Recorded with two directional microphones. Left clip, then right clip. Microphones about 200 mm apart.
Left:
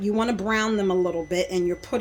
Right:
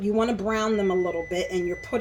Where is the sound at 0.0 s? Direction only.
50° left (ahead or behind).